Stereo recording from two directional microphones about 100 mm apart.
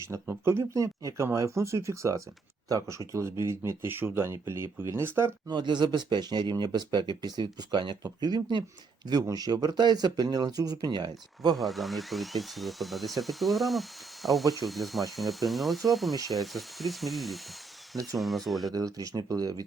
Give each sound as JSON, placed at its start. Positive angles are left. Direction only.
{"t": 0.0, "sound": "speech", "side_deg": -25}
{"t": 5.5, "sound": "speech", "side_deg": -50}
{"t": 11.5, "sound": "speech", "side_deg": 0}
{"t": 18.7, "sound": "speech", "side_deg": -40}